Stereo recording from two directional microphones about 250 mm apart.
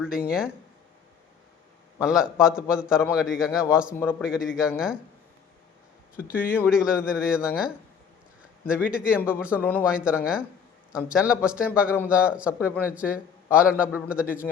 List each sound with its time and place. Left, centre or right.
0.0 s a man's voice: centre
2.0 s a man's voice: centre
6.3 s a man's voice: centre
9.6 s a man's voice: centre
9.8 s a man's voice: centre